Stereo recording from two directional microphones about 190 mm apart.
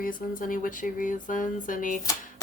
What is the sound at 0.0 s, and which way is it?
A woman's voice, 45° left (ahead or behind).